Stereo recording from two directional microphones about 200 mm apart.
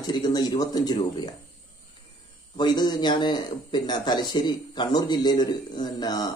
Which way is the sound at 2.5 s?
20° left (ahead or behind).